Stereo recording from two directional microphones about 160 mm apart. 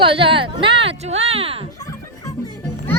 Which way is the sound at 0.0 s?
35° right (ahead or behind).